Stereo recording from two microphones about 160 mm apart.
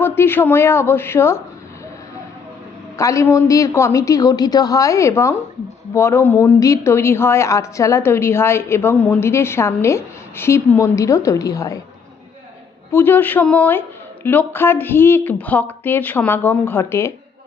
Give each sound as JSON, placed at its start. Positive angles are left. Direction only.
{"t": 0.0, "sound": "a woman's voice", "side_deg": 15}
{"t": 3.0, "sound": "a woman's voice", "side_deg": 20}
{"t": 12.9, "sound": "a woman's voice", "side_deg": 15}